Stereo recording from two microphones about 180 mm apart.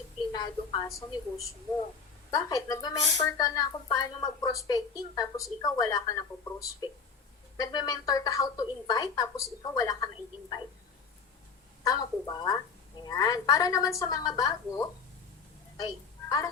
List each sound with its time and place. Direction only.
0.3 s speech: 25° left (ahead or behind)
11.8 s speech: 20° left (ahead or behind)